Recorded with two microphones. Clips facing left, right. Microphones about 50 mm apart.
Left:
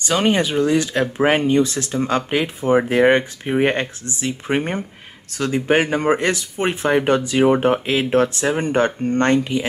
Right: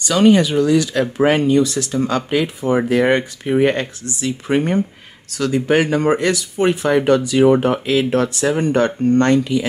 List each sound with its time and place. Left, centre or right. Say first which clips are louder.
0.0 s speech: right 5 dB; left